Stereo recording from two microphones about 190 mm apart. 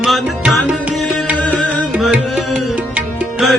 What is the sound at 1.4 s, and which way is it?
Music, 5° left (ahead or behind).